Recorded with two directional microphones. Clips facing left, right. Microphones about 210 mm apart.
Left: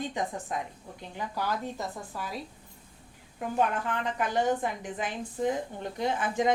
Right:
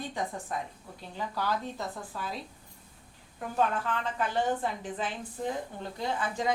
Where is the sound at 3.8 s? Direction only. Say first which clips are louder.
Left 1 dB; 15° left (ahead or behind).